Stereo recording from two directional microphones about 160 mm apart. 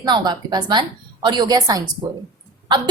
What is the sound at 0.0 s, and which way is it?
A woman's voice, 25° right (ahead or behind).